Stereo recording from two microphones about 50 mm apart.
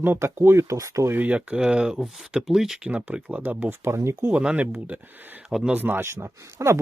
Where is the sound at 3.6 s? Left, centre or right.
Right.